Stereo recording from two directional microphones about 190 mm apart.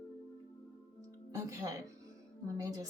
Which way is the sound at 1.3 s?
15° right (ahead or behind).